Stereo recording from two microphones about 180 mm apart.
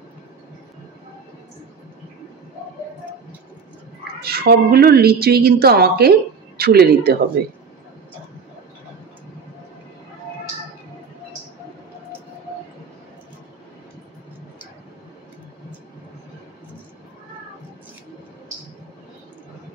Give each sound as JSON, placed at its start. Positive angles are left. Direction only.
{"t": 4.2, "sound": "a woman's voice", "side_deg": -60}